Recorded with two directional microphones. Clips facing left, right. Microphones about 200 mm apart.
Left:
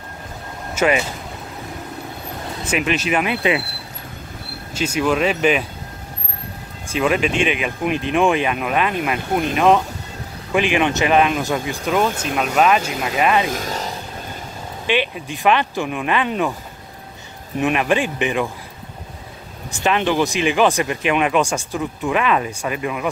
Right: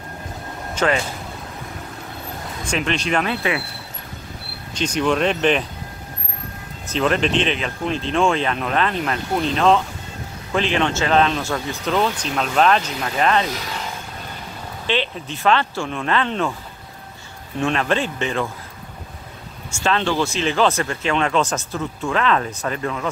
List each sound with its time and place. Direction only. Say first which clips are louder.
0.7 s speech: left 2 dB; 10° left (ahead or behind)
2.6 s speech: left 2 dB; 5° left (ahead or behind)
4.7 s speech: left 1 dB; 5° left (ahead or behind)
6.9 s speech: left 1 dB; 10° left (ahead or behind)
13.5 s speech: left 4 dB; 45° left (ahead or behind)
14.9 s speech: left 2 dB; 10° left (ahead or behind)
17.6 s speech: left 2 dB; 15° left (ahead or behind)
19.8 s speech: left 2 dB; 15° left (ahead or behind)